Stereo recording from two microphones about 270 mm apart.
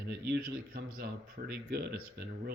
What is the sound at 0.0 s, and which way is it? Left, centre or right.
Speech, right.